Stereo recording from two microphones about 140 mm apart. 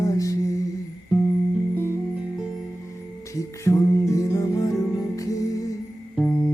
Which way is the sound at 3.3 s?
20° left (ahead or behind).